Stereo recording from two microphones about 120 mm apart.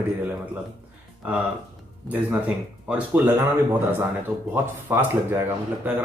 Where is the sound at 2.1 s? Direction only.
10° right (ahead or behind).